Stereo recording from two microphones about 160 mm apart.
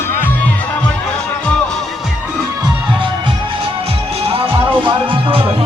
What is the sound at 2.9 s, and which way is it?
Music, 30° right (ahead or behind).